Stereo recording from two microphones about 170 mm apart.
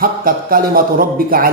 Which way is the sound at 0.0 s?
60° right (ahead or behind).